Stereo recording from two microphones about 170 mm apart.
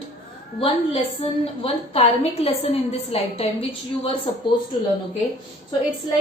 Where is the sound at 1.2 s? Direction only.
35° left (ahead or behind).